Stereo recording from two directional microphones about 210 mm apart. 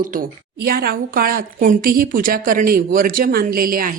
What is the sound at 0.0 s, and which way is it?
A woman's voice, 40° right (ahead or behind).